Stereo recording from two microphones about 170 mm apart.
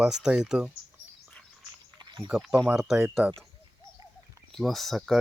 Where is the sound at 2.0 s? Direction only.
25° right (ahead or behind).